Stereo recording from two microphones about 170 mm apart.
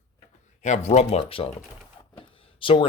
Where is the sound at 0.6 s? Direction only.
45° left (ahead or behind).